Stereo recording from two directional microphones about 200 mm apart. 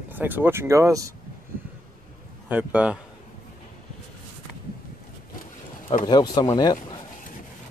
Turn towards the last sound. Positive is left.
turn(degrees=20)  # may be behind; listen again after turning